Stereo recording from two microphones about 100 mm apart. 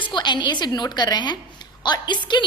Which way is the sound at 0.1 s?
50° left (ahead or behind).